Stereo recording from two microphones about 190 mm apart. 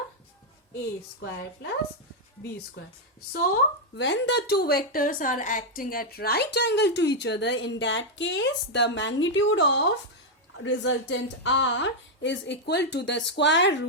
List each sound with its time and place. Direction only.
3.4 s a woman's voice: 65° left (ahead or behind)